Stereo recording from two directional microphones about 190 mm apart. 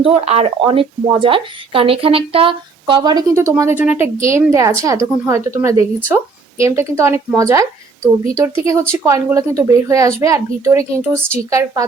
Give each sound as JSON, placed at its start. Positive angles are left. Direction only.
{"t": 0.0, "sound": "speech", "side_deg": -30}